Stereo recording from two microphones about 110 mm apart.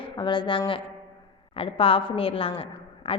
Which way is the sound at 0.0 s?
45° left (ahead or behind).